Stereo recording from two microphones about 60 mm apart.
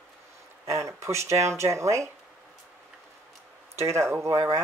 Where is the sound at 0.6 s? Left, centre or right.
Right.